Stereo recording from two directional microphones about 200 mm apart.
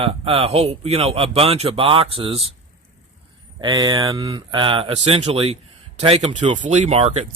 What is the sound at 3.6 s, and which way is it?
Speech, 20° right (ahead or behind).